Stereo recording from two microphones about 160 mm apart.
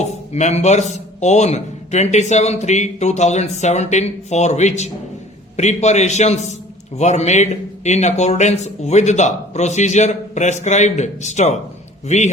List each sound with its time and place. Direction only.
0.0 s a man's voice: 45° left (ahead or behind)